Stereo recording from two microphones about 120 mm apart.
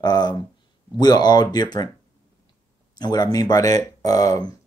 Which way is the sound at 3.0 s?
35° left (ahead or behind).